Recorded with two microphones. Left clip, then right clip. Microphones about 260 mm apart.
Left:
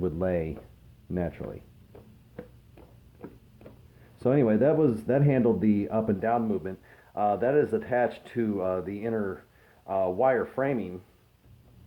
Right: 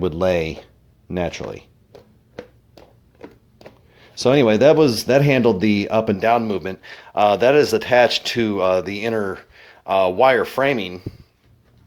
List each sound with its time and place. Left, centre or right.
0.0 s speech: right
4.2 s speech: right